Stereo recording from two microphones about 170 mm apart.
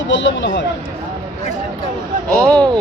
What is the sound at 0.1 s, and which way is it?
Speech, 90° left.